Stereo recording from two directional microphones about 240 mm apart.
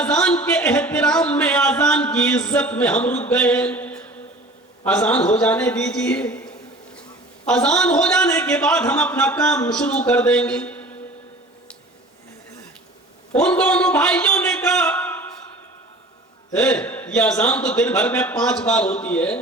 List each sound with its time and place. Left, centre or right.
0.0 s a sound: centre
4.9 s a man's voice: centre
13.3 s a man's voice: centre
16.5 s a man's voice: centre